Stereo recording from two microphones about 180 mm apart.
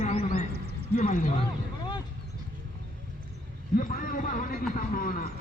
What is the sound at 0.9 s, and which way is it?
Speech, 45° left (ahead or behind).